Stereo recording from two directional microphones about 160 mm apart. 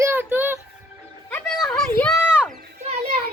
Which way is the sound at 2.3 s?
5° right (ahead or behind).